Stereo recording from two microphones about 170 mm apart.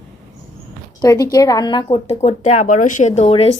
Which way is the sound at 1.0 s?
20° left (ahead or behind).